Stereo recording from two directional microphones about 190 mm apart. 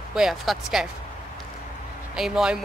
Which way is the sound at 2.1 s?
5° right (ahead or behind).